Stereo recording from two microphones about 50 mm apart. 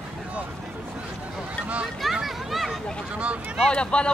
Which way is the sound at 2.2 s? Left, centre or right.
Centre.